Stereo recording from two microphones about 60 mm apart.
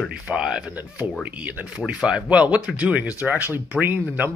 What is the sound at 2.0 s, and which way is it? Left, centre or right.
Speech, centre.